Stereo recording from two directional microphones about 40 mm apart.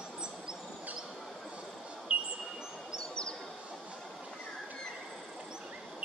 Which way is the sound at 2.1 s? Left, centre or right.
Right.